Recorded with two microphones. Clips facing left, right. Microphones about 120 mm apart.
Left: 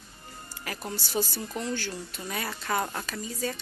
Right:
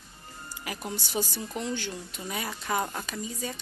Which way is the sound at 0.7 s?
15° right (ahead or behind).